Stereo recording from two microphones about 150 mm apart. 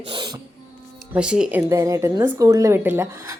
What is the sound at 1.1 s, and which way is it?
Speech, 5° right (ahead or behind).